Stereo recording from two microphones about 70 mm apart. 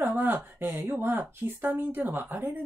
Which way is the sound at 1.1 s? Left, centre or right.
Right.